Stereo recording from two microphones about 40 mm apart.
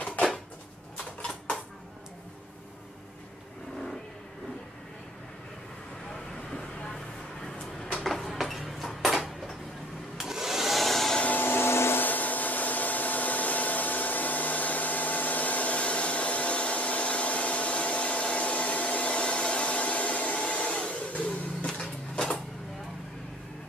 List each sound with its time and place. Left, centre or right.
7.8 s a sound: centre
8.2 s a sound: centre
10.1 s hair dryer: centre
11.3 s vacuum cleaner: left
12.0 s hair dryer: left
20.9 s music: left
21.6 s printer: left